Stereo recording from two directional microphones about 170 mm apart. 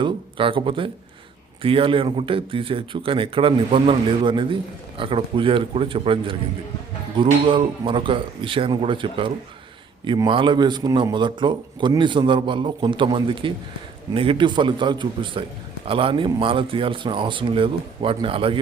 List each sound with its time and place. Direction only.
0.0 s a man's voice: 30° right (ahead or behind)